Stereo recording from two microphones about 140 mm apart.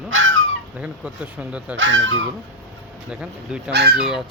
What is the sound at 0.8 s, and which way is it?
Speech, 10° right (ahead or behind).